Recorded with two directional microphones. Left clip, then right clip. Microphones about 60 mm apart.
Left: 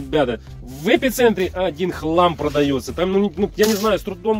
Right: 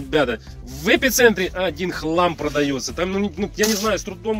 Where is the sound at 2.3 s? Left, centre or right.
Left.